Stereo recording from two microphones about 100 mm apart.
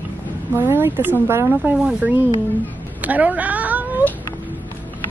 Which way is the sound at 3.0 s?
15° right (ahead or behind).